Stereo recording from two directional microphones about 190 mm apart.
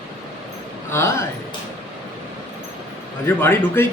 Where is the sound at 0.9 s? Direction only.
15° left (ahead or behind).